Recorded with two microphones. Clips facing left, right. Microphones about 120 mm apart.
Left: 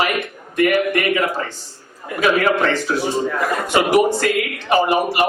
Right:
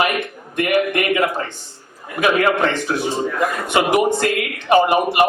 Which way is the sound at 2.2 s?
20° right (ahead or behind).